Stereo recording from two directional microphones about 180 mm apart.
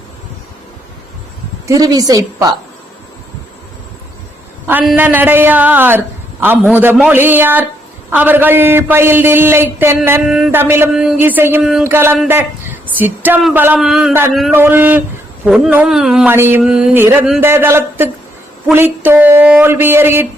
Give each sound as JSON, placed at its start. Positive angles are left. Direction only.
{"t": 1.6, "sound": "a woman's voice", "side_deg": -20}
{"t": 4.6, "sound": "a man's voice", "side_deg": -10}
{"t": 14.5, "sound": "a man's voice", "side_deg": -10}